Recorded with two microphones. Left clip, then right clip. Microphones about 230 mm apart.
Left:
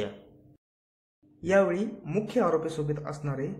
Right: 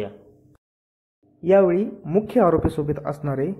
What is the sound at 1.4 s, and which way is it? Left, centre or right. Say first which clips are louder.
Speech: right 7 dB; centre.